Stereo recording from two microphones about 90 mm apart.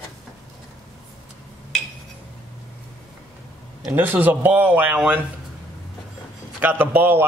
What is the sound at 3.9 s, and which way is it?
A man's voice, 20° right (ahead or behind).